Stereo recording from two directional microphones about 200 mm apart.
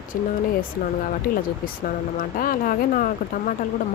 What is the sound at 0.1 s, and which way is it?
Speech, 45° left (ahead or behind).